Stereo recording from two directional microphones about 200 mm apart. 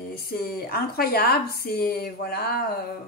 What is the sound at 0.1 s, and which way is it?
A woman's voice, 50° left (ahead or behind).